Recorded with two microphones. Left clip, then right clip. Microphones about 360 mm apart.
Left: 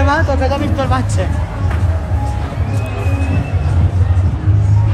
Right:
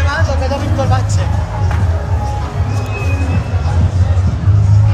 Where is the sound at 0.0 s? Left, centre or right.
Centre.